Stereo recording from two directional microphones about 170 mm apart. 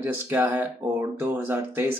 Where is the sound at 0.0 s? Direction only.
10° right (ahead or behind).